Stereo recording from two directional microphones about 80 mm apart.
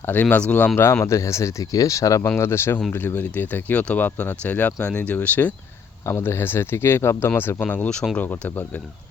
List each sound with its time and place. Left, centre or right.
0.0 s speech: left
1.0 s speech: left
2.2 s speech: left
6.1 s speech: left
7.6 s speech: centre
8.2 s speech: left